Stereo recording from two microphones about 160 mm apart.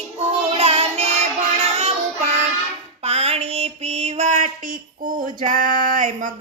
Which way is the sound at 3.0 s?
40° right (ahead or behind).